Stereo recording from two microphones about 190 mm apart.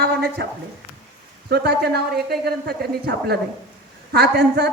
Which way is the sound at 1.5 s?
60° right (ahead or behind).